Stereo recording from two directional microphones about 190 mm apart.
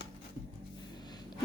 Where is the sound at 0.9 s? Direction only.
20° left (ahead or behind).